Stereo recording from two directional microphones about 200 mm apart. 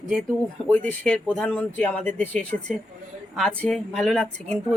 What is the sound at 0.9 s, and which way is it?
Speech, 5° left (ahead or behind).